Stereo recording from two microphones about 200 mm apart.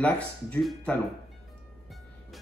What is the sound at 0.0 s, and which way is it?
Speech, 5° left (ahead or behind).